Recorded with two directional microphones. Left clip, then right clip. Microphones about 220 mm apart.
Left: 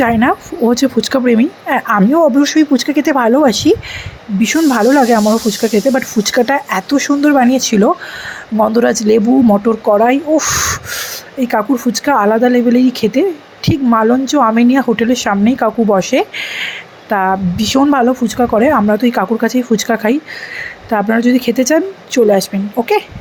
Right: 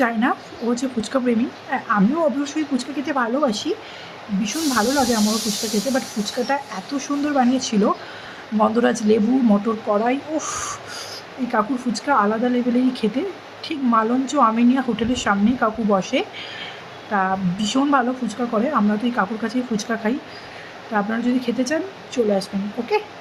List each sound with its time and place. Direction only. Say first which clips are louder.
0.0 s a woman's voice: left 8 dB; 30° left (ahead or behind)